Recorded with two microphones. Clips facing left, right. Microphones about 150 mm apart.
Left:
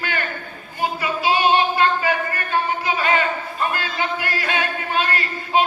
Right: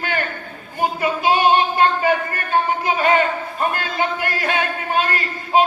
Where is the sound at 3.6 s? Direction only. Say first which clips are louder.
Right 3 dB; 50° right (ahead or behind).